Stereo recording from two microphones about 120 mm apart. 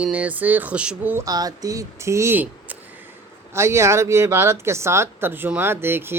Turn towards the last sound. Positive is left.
turn(degrees=-20)  # may be behind; listen again after turning